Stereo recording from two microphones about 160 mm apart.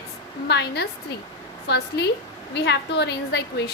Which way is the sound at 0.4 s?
90° left.